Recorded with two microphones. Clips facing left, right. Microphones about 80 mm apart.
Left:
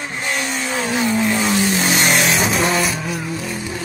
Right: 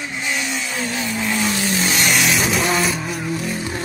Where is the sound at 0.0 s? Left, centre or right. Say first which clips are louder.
Left 1 dB; left.